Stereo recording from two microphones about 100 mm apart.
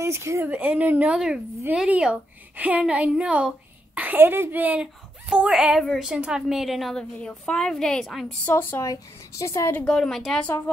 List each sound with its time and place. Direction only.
0.0 s speech: 25° right (ahead or behind)
0.5 s a woman's voice: 15° right (ahead or behind)
5.3 s a woman's voice: 5° right (ahead or behind)
8.5 s a woman's voice: 20° left (ahead or behind)
9.7 s a woman's voice: 20° left (ahead or behind)
9.9 s a woman's voice: 5° left (ahead or behind)